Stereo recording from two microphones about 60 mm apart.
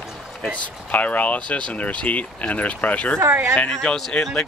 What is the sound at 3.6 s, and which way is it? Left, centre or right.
Speech, centre.